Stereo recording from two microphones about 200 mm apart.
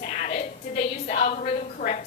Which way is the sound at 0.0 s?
35° left (ahead or behind).